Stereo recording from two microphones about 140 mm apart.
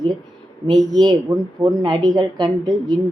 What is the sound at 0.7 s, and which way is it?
Speech, centre (ahead or behind).